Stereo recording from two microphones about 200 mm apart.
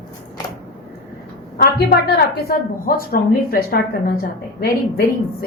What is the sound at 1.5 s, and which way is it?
A woman's voice, 55° left (ahead or behind).